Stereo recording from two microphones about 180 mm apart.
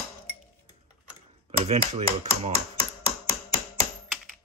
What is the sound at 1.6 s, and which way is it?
Typewriter, 35° right (ahead or behind).